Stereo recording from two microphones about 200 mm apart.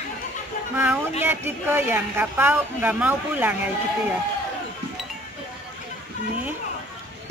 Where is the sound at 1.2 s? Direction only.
10° right (ahead or behind).